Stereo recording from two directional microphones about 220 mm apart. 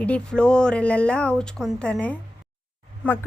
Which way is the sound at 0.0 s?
5° left (ahead or behind).